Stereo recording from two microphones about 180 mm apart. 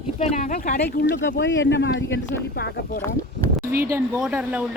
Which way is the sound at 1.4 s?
85° left.